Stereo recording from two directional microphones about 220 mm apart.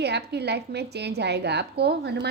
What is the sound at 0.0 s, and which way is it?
A woman's voice, 50° right (ahead or behind).